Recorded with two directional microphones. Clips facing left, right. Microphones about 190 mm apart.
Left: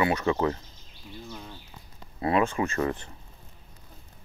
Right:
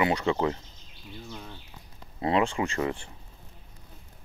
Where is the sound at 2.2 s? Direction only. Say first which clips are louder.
Left 1 dB; 20° right (ahead or behind).